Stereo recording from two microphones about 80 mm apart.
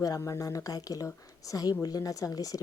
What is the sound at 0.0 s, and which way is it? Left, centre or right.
Speech, left.